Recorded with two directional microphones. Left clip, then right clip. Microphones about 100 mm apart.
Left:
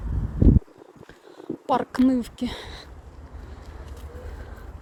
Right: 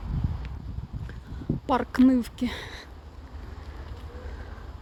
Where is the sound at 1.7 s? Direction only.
15° right (ahead or behind).